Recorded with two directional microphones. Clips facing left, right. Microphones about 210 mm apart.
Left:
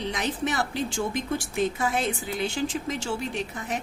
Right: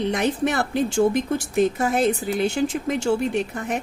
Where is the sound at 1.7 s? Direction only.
45° right (ahead or behind).